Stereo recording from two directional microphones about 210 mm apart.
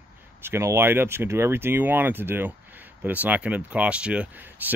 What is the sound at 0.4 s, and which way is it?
Speech, 10° right (ahead or behind).